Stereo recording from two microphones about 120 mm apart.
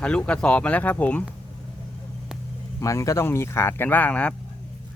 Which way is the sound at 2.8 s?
25° left (ahead or behind).